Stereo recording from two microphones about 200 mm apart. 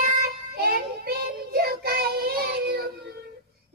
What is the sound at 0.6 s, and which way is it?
Child singing, 50° right (ahead or behind).